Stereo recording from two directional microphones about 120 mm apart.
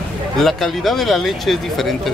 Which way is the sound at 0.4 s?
Centre (ahead or behind).